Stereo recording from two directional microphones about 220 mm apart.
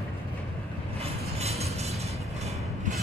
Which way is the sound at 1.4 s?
30° right (ahead or behind).